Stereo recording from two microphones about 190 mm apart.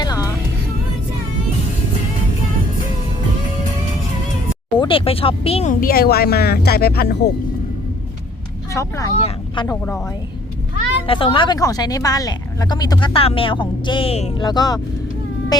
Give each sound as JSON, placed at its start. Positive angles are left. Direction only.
{"t": 0.0, "sound": "music", "side_deg": 20}
{"t": 4.8, "sound": "a woman's voice", "side_deg": 30}
{"t": 5.8, "sound": "speech", "side_deg": 55}
{"t": 8.7, "sound": "speech", "side_deg": 15}
{"t": 11.0, "sound": "a woman's voice", "side_deg": 30}
{"t": 14.4, "sound": "a woman's voice", "side_deg": 20}